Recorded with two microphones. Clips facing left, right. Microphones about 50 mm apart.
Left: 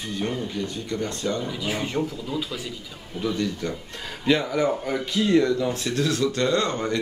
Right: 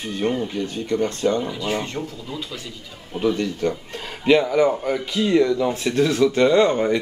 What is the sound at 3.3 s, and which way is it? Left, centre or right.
Speech, right.